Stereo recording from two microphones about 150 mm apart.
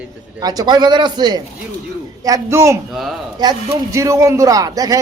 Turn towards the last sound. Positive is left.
turn(degrees=-25)  # may be behind; listen again after turning